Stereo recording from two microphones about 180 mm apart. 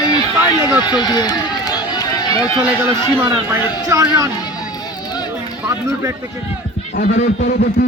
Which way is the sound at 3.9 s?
20° right (ahead or behind).